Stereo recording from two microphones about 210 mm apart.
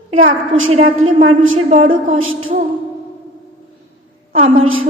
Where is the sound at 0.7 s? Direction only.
30° right (ahead or behind).